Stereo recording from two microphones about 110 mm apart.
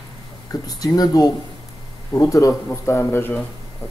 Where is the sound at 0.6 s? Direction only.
35° left (ahead or behind).